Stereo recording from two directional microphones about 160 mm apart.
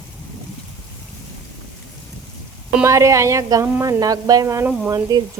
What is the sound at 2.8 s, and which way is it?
Speech, 20° right (ahead or behind).